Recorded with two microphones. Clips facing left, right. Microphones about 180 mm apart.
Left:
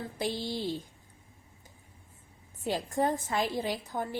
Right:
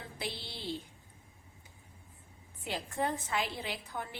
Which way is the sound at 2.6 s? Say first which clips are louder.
Left 6 dB; 40° left (ahead or behind).